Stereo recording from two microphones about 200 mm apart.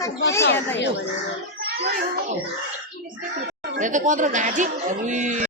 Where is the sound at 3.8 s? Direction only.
40° right (ahead or behind).